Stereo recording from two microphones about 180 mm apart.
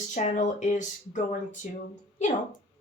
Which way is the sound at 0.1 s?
45° left (ahead or behind).